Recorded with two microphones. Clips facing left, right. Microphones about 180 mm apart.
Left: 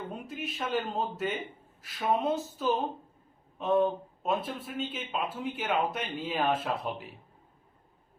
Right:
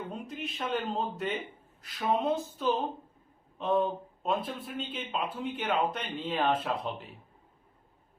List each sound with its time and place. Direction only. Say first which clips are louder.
0.1 s speech: even; 5° left (ahead or behind)